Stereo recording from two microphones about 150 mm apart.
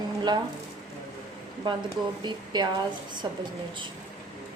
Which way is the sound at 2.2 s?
30° right (ahead or behind).